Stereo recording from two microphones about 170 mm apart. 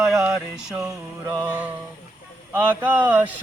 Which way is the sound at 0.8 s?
20° right (ahead or behind).